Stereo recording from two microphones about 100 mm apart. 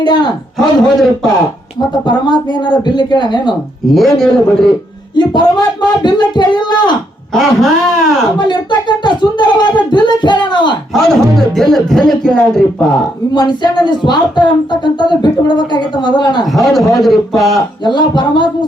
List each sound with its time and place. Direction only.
0.0 s speech: 50° left (ahead or behind)
0.5 s speech: centre (ahead or behind)
2.0 s speech: 45° left (ahead or behind)
3.8 s speech: centre (ahead or behind)
5.1 s speech: 45° left (ahead or behind)
7.3 s speech: centre (ahead or behind)
8.4 s a sound: 50° left (ahead or behind)
10.9 s speech: 5° left (ahead or behind)
13.3 s speech: 45° left (ahead or behind)
16.5 s speech: centre (ahead or behind)
17.8 s speech: 50° left (ahead or behind)